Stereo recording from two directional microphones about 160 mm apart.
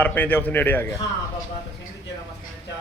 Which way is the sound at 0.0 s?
10° left (ahead or behind).